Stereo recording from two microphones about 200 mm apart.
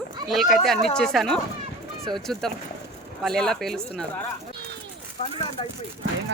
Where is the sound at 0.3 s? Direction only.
Centre (ahead or behind).